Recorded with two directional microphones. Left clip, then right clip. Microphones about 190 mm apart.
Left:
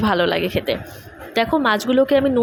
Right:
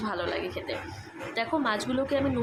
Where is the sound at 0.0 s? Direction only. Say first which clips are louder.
Left 13 dB; 40° left (ahead or behind).